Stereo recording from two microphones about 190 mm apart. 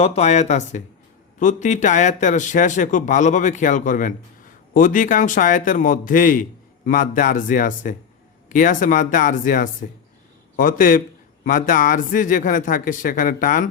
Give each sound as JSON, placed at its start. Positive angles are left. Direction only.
{"t": 0.0, "sound": "a man's voice", "side_deg": 35}